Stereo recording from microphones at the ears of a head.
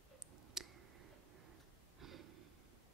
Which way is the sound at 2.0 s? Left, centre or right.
Right.